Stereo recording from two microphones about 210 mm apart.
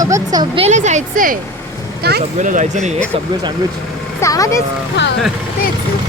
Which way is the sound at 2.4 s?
35° right (ahead or behind).